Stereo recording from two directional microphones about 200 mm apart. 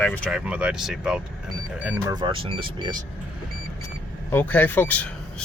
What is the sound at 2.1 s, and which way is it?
Speech, 25° right (ahead or behind).